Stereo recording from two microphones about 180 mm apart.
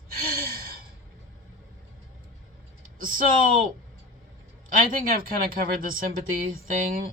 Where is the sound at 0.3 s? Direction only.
55° right (ahead or behind).